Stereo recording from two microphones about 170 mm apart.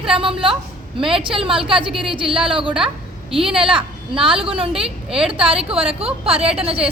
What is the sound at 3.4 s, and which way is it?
Speech, 5° right (ahead or behind).